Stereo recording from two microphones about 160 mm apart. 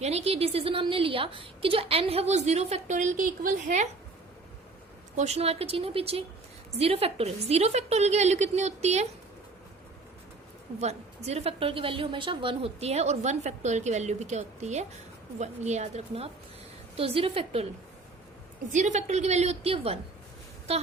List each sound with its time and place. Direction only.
0.0 s a woman's voice: 40° right (ahead or behind)
5.1 s a woman's voice: 45° right (ahead or behind)
10.8 s a woman's voice: 45° right (ahead or behind)
18.7 s a woman's voice: 50° right (ahead or behind)